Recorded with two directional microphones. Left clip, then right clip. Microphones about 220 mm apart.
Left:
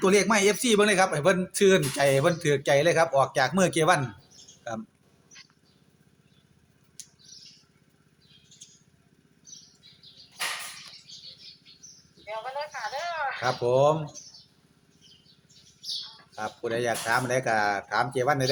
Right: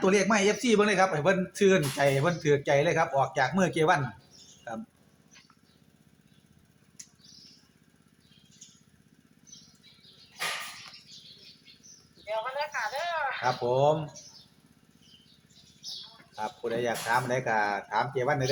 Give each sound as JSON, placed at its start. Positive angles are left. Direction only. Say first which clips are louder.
{"t": 0.0, "sound": "speech", "louder": "left 3 dB", "side_deg": 55}
{"t": 12.2, "sound": "a sound", "louder": "right 2 dB", "side_deg": 0}
{"t": 13.4, "sound": "speech", "louder": "left 3 dB", "side_deg": 55}
{"t": 16.3, "sound": "speech", "louder": "left 2 dB", "side_deg": 55}